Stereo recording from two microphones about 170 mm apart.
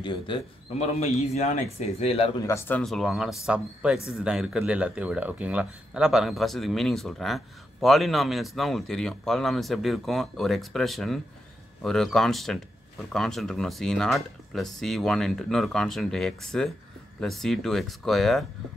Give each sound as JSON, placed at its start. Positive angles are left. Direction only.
{"t": 0.0, "sound": "speech", "side_deg": 30}
{"t": 2.4, "sound": "speech", "side_deg": 15}
{"t": 2.8, "sound": "speech", "side_deg": 0}